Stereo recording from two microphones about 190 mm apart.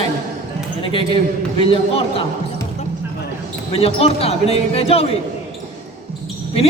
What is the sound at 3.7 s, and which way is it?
Speech, 30° left (ahead or behind).